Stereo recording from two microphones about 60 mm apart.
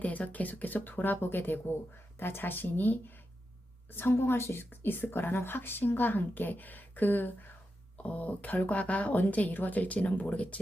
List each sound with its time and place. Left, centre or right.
0.0 s a woman's voice: left